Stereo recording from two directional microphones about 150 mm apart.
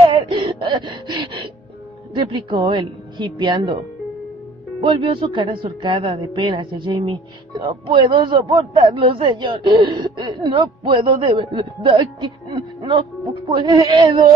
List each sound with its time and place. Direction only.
0.0 s gasp: 35° right (ahead or behind)
2.1 s speech: 35° right (ahead or behind)